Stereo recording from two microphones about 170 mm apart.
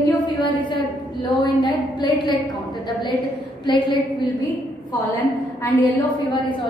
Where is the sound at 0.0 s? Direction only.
25° left (ahead or behind).